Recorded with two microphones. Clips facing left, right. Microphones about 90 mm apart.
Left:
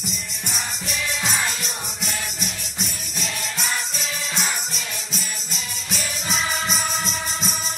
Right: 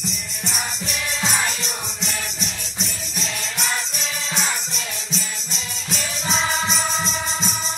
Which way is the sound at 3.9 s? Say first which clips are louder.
Right 1 dB; 15° right (ahead or behind).